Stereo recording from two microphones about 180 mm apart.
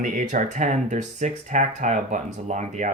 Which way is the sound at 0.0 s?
45° right (ahead or behind).